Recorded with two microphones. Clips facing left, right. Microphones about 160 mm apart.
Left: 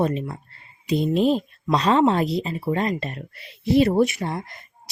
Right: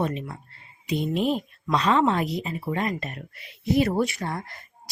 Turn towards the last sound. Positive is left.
turn(degrees=20)  # may be behind; listen again after turning